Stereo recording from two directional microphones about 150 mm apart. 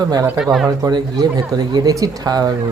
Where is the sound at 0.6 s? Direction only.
25° right (ahead or behind).